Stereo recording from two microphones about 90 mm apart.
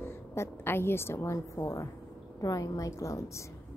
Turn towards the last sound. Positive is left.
turn(degrees=35)  # may be behind; listen again after turning